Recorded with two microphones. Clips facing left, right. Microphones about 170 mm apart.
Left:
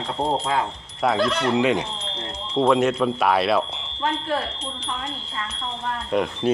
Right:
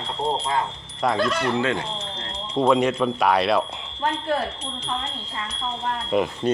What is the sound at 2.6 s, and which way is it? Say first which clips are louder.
Speech: left 1 dB; centre (ahead or behind).